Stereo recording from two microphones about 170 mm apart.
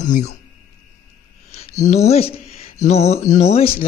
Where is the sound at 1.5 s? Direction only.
40° left (ahead or behind).